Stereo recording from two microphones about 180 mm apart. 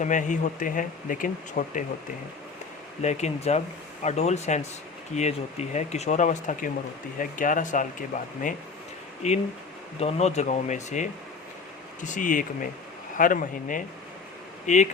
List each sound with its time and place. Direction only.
0.0 s speech: 45° left (ahead or behind)
3.0 s speech: 40° left (ahead or behind)
9.2 s speech: 35° left (ahead or behind)